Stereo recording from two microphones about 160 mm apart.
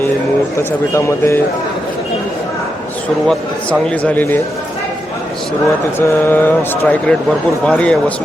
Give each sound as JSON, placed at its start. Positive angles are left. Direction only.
{"t": 0.9, "sound": "speech", "side_deg": 15}
{"t": 3.2, "sound": "speech", "side_deg": 5}
{"t": 6.0, "sound": "speech", "side_deg": 15}